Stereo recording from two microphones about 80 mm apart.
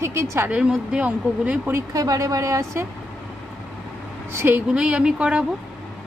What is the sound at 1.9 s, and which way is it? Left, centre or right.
Speech, right.